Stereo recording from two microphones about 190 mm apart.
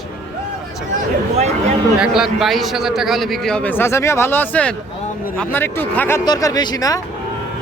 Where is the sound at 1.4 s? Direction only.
35° right (ahead or behind).